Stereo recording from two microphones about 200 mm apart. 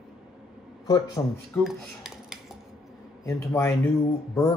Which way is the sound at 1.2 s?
15° left (ahead or behind).